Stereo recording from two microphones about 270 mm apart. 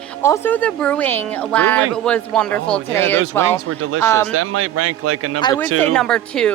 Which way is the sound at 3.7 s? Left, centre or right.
Right.